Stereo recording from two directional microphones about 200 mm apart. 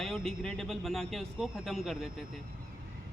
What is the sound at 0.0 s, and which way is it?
Speech, centre (ahead or behind).